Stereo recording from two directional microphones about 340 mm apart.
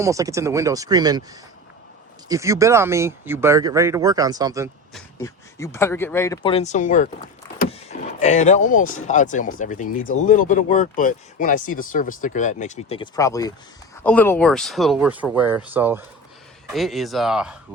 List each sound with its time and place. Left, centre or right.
0.0 s speech: centre
4.9 s speech: centre